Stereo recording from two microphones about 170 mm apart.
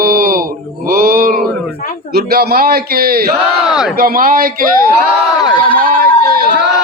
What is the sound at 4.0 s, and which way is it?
Speech, 55° right (ahead or behind).